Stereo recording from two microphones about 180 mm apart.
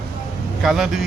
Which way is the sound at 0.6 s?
Centre (ahead or behind).